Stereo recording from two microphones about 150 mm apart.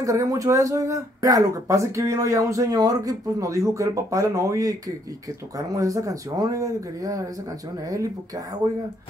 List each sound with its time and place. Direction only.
0.0 s speech: 20° right (ahead or behind)